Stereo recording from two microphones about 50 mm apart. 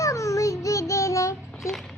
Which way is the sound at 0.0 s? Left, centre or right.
Left.